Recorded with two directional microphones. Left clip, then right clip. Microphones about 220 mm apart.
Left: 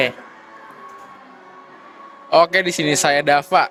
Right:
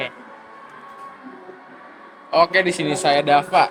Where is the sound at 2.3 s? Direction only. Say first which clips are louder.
Left 2 dB; 50° left (ahead or behind).